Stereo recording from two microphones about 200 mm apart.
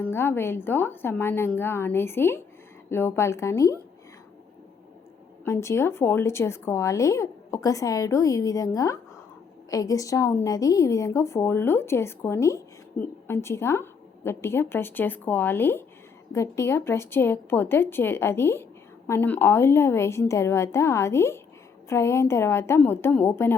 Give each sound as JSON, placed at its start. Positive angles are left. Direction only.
{"t": 0.0, "sound": "a woman's voice", "side_deg": 10}
{"t": 5.5, "sound": "a woman's voice", "side_deg": 15}